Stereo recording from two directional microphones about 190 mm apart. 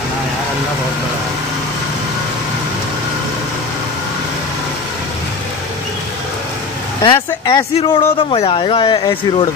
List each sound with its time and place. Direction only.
7.0 s speech: 25° left (ahead or behind)